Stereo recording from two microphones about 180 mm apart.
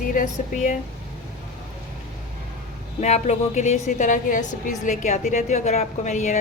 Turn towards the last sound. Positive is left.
turn(degrees=40)  # may be behind; listen again after turning